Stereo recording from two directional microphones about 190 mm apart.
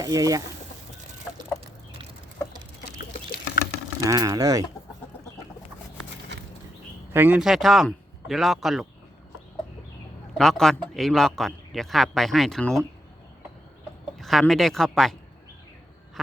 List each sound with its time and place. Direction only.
0.0 s speech: 20° right (ahead or behind)
3.0 s a sound: 50° left (ahead or behind)
4.0 s speech: 20° right (ahead or behind)
7.1 s speech: 10° right (ahead or behind)
10.3 s a man's voice: centre (ahead or behind)
14.2 s a man's voice: centre (ahead or behind)